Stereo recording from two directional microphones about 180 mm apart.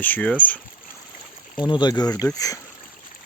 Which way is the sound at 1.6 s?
25° left (ahead or behind).